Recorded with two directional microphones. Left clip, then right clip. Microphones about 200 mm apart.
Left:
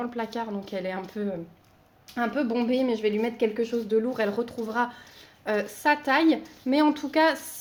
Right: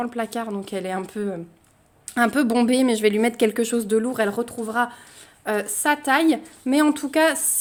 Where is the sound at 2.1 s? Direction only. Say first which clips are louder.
Right 7 dB; 60° right (ahead or behind).